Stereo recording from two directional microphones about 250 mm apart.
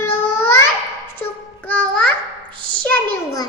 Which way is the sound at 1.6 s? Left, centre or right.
Centre.